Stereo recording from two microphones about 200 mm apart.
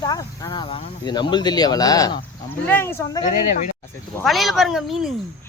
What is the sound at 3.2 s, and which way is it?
Speech, 40° left (ahead or behind).